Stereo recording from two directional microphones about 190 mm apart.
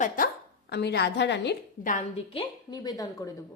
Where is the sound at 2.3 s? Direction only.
25° left (ahead or behind).